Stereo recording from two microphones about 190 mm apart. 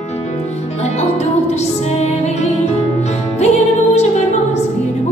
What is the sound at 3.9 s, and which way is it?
Music, 35° left (ahead or behind).